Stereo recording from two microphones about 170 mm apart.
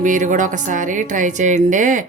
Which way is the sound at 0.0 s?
50° right (ahead or behind).